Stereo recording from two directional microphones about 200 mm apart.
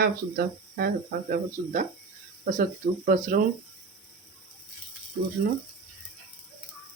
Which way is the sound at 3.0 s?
40° right (ahead or behind).